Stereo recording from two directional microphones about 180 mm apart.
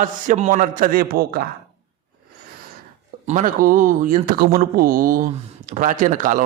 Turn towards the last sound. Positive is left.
turn(degrees=-45)  # may be behind; listen again after turning